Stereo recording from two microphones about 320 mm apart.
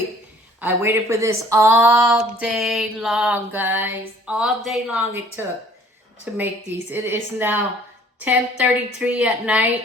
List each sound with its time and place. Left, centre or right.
0.6 s a woman's voice: centre